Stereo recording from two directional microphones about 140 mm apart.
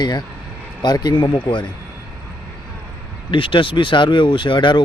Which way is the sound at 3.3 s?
35° left (ahead or behind).